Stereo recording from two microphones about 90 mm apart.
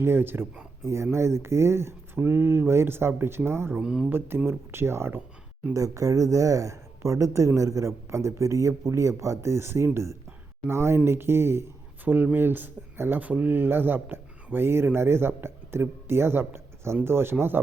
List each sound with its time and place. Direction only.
0.0 s speech: 25° right (ahead or behind)
3.8 s speech: 5° right (ahead or behind)
4.4 s a woman's voice: 30° right (ahead or behind)